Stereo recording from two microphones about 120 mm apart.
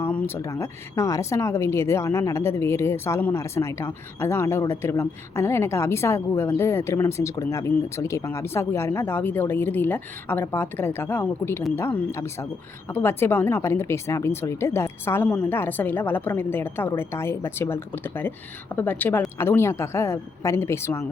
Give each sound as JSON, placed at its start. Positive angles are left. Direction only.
{"t": 0.0, "sound": "a woman's voice", "side_deg": 15}